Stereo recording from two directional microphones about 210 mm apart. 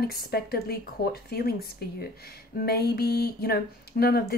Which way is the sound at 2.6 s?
45° left (ahead or behind).